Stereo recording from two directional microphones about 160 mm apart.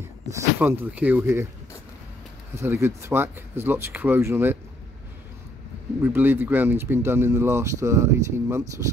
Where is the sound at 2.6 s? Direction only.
15° right (ahead or behind).